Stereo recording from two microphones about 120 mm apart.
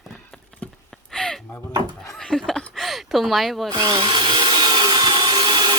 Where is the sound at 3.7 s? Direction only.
40° right (ahead or behind).